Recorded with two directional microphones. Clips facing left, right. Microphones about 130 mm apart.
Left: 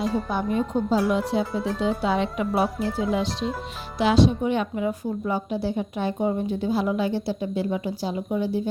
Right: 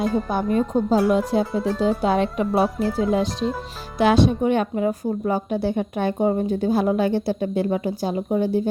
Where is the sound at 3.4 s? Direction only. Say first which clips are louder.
Right 4 dB; centre (ahead or behind).